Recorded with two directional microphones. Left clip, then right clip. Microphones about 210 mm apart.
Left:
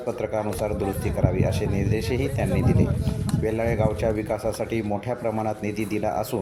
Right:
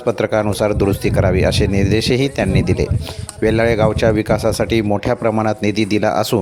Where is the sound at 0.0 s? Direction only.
45° right (ahead or behind).